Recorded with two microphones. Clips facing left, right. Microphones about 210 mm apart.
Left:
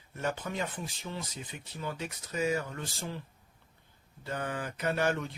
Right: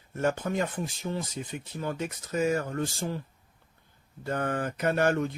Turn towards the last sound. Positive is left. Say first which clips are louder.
# right 5 dB
turn(degrees=-50)  # may be behind; listen again after turning